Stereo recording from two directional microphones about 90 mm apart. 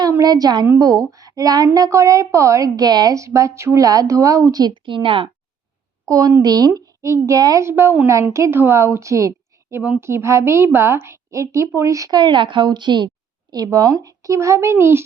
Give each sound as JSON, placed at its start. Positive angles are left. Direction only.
{"t": 0.2, "sound": "a woman's voice", "side_deg": -45}
{"t": 4.6, "sound": "a woman's voice", "side_deg": -65}
{"t": 6.1, "sound": "a woman's voice", "side_deg": -40}
{"t": 7.7, "sound": "a woman's voice", "side_deg": -25}
{"t": 12.1, "sound": "a woman's voice", "side_deg": -60}
{"t": 13.5, "sound": "a woman's voice", "side_deg": -45}